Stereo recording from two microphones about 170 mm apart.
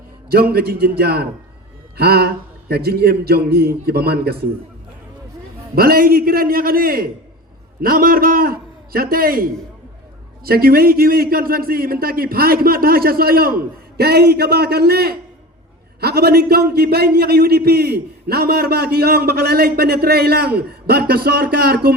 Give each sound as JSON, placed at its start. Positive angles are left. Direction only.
{"t": 0.3, "sound": "a man's voice", "side_deg": -65}
{"t": 5.7, "sound": "a man's voice", "side_deg": -60}